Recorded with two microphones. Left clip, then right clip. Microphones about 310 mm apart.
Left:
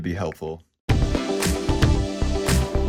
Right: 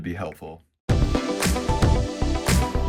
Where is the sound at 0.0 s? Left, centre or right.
Centre.